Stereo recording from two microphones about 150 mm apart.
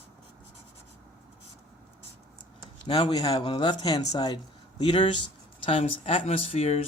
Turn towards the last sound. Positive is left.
turn(degrees=45)  # may be behind; listen again after turning